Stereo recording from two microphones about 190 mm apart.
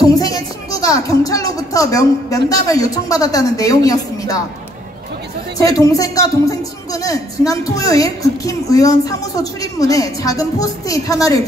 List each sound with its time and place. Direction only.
0.0 s speech: 20° left (ahead or behind)
5.6 s a woman's voice: 15° left (ahead or behind)